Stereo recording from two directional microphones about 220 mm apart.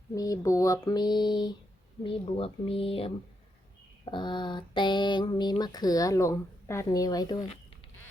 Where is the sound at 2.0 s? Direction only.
25° left (ahead or behind).